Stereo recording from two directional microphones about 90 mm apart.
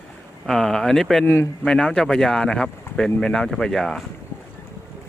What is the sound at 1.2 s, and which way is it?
Speech, 30° left (ahead or behind).